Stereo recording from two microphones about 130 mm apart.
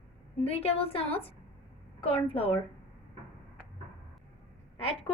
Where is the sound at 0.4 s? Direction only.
50° left (ahead or behind).